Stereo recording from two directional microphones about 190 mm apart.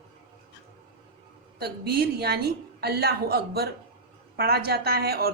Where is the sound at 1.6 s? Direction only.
55° right (ahead or behind).